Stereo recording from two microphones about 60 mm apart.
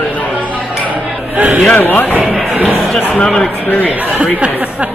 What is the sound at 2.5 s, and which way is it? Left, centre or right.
Speech, centre.